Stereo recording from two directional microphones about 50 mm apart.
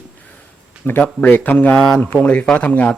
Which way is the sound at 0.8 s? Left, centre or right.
Left.